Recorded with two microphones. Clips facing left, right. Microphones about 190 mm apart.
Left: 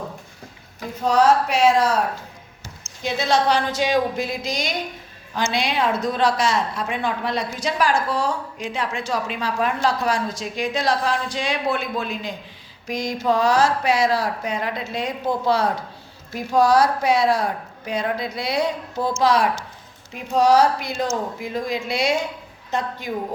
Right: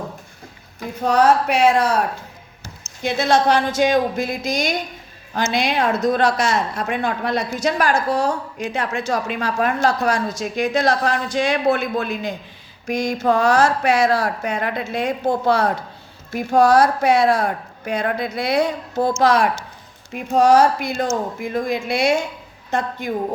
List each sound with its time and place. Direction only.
1.0 s speech: 60° right (ahead or behind)
3.0 s a woman's voice: 55° right (ahead or behind)